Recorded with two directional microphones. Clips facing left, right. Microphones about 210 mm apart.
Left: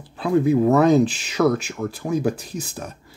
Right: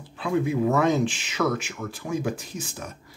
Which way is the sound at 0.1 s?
35° left (ahead or behind).